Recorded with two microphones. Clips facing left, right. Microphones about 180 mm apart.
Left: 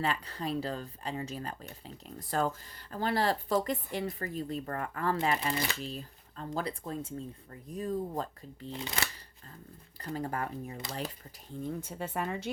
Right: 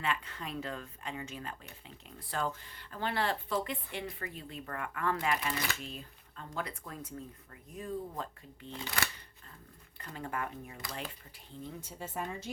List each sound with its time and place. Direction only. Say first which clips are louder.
0.0 s speech: left 4 dB; 35° left (ahead or behind)
9.0 s speech: right 1 dB; 20° left (ahead or behind)
10.0 s speech: left 4 dB; 35° left (ahead or behind)
11.6 s speech: left 7 dB; 55° left (ahead or behind)